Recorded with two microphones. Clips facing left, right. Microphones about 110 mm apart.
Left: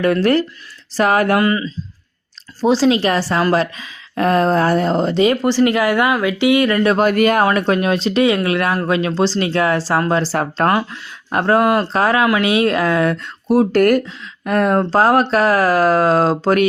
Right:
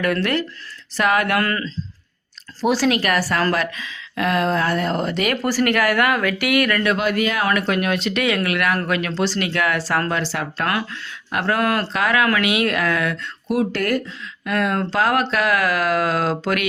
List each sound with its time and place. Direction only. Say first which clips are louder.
0.0 s speech: left 6 dB; 30° left (ahead or behind)
1.4 s speech: left 6 dB; 15° left (ahead or behind)
2.6 s a woman's voice: left 4 dB; 25° left (ahead or behind)
6.9 s speech: left 7 dB; 45° left (ahead or behind)
7.7 s speech: left 5 dB; 30° left (ahead or behind)
11.3 s a woman's voice: left 7 dB; 30° left (ahead or behind)
11.6 s speech: left 5 dB; 15° left (ahead or behind)
11.9 s speech: left 4 dB; 30° left (ahead or behind)